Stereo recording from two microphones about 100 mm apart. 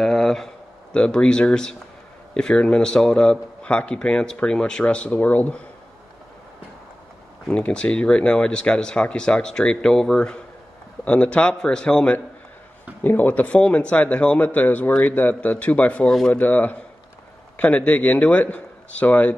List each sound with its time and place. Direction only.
0.0 s a sound: 5° left (ahead or behind)
0.9 s a man's voice: 10° left (ahead or behind)
7.4 s a man's voice: 10° left (ahead or behind)